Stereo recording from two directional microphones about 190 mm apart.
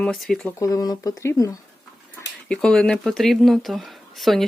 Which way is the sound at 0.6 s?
20° left (ahead or behind).